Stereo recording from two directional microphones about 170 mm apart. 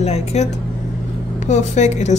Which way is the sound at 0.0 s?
40° left (ahead or behind).